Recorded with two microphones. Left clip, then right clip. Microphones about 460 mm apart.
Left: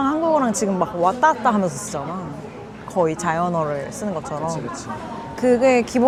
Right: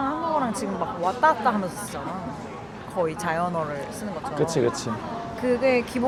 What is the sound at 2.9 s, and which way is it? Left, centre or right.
Speech, left.